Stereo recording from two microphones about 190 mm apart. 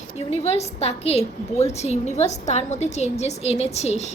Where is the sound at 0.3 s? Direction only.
35° left (ahead or behind).